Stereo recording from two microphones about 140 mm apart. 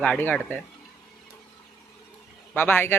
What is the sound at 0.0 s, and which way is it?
Speech, 10° left (ahead or behind).